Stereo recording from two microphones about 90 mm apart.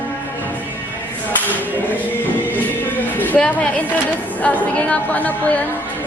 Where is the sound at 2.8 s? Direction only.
20° left (ahead or behind).